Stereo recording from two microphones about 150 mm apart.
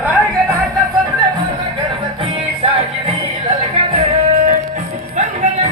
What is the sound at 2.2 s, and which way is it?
Music, 40° right (ahead or behind).